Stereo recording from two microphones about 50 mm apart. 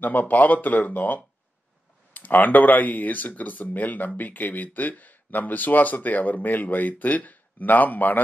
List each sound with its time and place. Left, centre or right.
0.0 s speech: left